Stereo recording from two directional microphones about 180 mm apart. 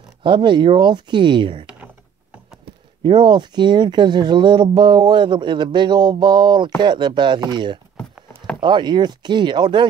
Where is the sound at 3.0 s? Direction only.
25° right (ahead or behind).